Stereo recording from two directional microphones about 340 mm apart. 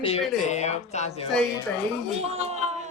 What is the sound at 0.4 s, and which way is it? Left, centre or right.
Speech, centre.